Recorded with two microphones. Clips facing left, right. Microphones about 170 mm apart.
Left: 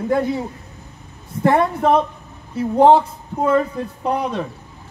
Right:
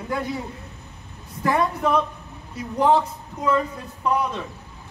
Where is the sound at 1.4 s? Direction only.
55° left (ahead or behind).